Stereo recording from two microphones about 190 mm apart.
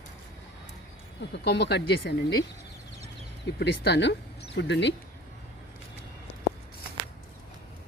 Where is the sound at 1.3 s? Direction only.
65° left (ahead or behind).